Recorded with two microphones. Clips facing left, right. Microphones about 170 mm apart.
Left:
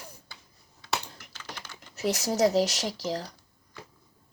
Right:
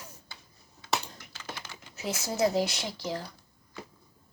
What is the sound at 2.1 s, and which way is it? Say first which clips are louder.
Speech: left 3 dB; 40° left (ahead or behind).